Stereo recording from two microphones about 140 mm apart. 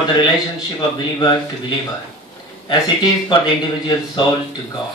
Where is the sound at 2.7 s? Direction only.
30° left (ahead or behind).